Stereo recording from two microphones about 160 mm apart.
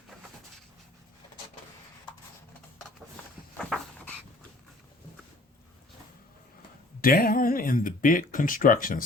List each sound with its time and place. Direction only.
3.6 s dog: 5° left (ahead or behind)
7.0 s speech: 65° left (ahead or behind)